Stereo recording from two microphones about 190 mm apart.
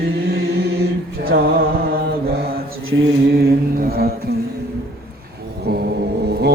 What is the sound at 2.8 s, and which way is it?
Mantra, 80° right.